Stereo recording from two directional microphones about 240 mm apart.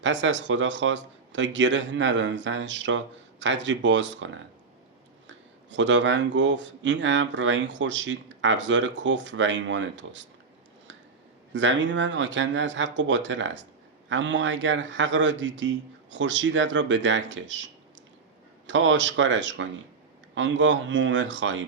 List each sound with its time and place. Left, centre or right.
0.0 s speech: right
5.7 s speech: right
11.5 s speech: right
18.7 s speech: right